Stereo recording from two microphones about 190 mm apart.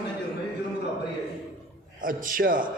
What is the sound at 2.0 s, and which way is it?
Speech, 45° right (ahead or behind).